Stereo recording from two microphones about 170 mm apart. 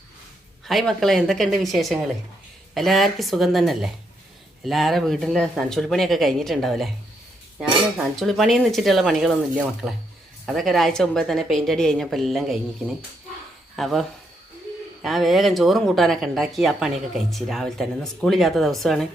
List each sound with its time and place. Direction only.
0.6 s speech: centre (ahead or behind)
13.7 s speech: centre (ahead or behind)